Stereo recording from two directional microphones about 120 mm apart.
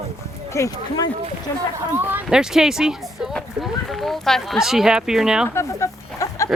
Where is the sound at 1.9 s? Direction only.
15° right (ahead or behind).